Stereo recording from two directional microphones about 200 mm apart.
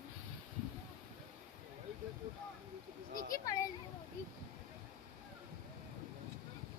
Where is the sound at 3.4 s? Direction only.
15° left (ahead or behind).